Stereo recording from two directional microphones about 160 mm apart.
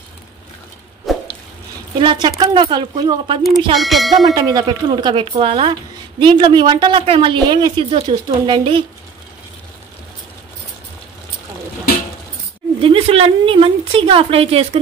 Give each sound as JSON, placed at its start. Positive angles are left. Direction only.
{"t": 1.1, "sound": "drip", "side_deg": 0}
{"t": 2.0, "sound": "speech", "side_deg": -30}
{"t": 3.7, "sound": "speech", "side_deg": 0}
{"t": 4.3, "sound": "speech", "side_deg": -25}
{"t": 12.8, "sound": "speech", "side_deg": -35}